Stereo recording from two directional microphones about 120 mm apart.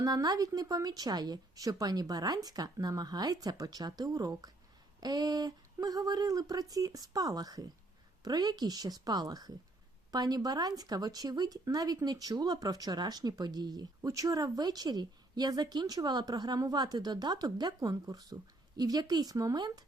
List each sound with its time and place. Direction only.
0.0 s speech: 35° right (ahead or behind)